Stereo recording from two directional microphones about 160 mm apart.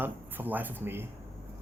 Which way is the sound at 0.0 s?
10° right (ahead or behind).